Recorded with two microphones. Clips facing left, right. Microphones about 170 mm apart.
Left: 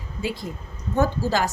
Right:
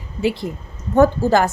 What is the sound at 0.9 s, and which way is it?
Speech, 55° right (ahead or behind).